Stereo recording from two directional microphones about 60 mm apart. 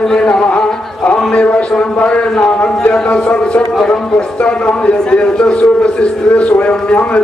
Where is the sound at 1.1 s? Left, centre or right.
Left.